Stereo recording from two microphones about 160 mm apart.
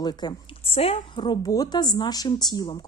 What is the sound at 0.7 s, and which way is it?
A woman's voice, 35° left (ahead or behind).